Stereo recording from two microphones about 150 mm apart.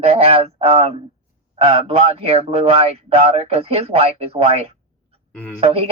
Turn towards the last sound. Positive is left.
turn(degrees=-40)  # may be behind; listen again after turning